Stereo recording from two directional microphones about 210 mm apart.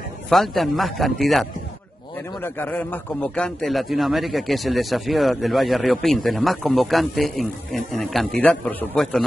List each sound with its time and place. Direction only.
0.3 s a man's voice: centre (ahead or behind)